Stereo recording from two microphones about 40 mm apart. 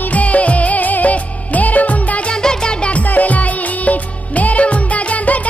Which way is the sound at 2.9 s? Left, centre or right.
Left.